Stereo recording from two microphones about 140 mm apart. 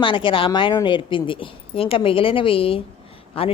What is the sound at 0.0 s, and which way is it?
Speech, 35° left (ahead or behind).